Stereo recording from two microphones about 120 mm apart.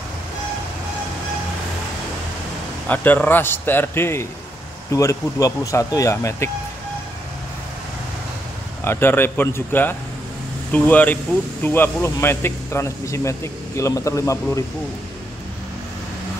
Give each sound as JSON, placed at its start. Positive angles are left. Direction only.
{"t": 2.9, "sound": "a man's voice", "side_deg": 15}
{"t": 8.8, "sound": "a man's voice", "side_deg": 20}